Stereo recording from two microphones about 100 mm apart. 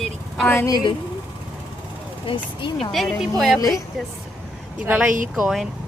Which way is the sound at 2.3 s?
60° left (ahead or behind).